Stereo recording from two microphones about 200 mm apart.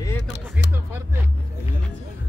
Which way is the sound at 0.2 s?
60° left (ahead or behind).